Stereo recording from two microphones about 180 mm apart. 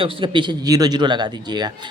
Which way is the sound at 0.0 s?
30° right (ahead or behind).